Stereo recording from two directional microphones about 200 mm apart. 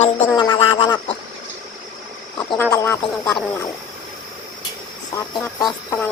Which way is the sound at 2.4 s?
20° left (ahead or behind).